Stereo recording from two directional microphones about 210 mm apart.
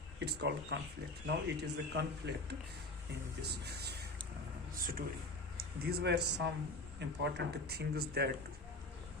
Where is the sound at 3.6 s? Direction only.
50° right (ahead or behind).